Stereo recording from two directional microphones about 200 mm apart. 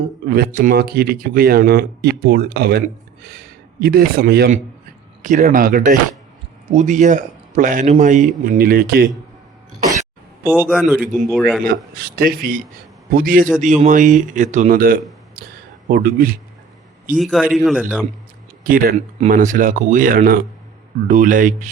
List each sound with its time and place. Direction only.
0.3 s a man's voice: 50° right (ahead or behind)
10.6 s a man's voice: 5° right (ahead or behind)
11.9 s a man's voice: 50° right (ahead or behind)
15.4 s a sound: 45° right (ahead or behind)
15.9 s speech: 45° right (ahead or behind)
17.2 s a man's voice: centre (ahead or behind)
18.6 s a man's voice: 45° right (ahead or behind)